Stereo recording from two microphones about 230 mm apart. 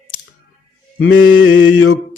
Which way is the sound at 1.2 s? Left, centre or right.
Left.